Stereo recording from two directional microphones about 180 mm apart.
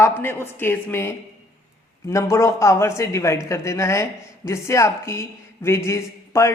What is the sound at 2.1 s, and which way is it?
A woman's voice, 15° left (ahead or behind).